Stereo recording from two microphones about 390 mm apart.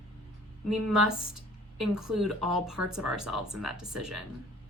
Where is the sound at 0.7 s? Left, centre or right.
Right.